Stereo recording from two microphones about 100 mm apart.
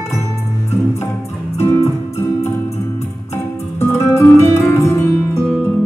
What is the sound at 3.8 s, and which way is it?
Music, 25° left (ahead or behind).